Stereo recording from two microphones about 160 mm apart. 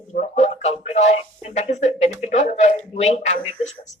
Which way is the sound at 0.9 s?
45° left (ahead or behind).